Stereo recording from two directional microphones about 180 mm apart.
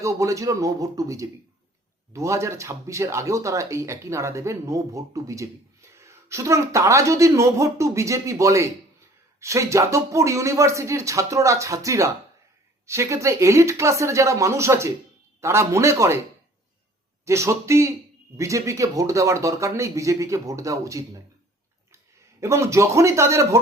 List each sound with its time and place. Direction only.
0.0 s speech: 15° right (ahead or behind)
17.2 s speech: 15° right (ahead or behind)
22.4 s speech: 15° right (ahead or behind)